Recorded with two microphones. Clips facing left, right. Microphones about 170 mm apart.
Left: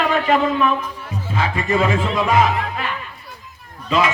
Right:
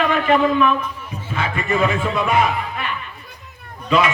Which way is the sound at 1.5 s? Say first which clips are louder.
Even; 30° left (ahead or behind).